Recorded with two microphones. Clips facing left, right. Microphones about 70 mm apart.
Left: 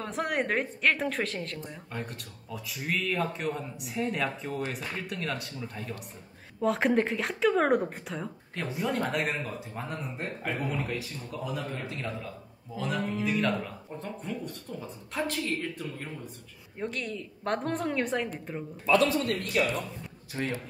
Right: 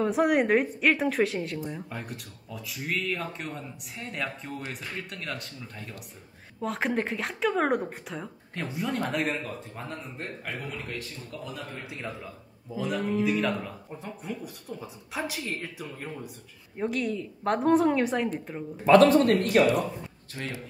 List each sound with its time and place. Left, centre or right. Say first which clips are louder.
0.0 s speech: right 7 dB; centre
11.8 s a man's voice: left 2 dB; centre
12.7 s speech: right 3 dB; centre
18.9 s a man's voice: right 7 dB; right
20.4 s a man's voice: left 4 dB; left